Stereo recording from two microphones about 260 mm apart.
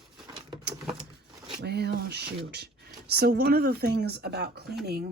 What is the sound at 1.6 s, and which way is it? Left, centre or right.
Speech, right.